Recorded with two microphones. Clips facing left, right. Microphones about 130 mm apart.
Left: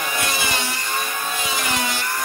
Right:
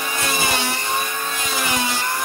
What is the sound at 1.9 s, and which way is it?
Vehicle, 20° right (ahead or behind).